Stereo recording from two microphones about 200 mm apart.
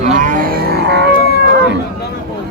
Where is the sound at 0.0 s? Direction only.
40° right (ahead or behind); by 1.1 s 55° right (ahead or behind).